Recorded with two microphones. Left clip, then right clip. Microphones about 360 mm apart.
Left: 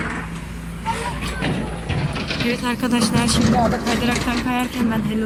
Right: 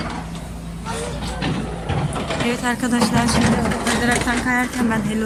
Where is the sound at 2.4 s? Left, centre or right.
Centre.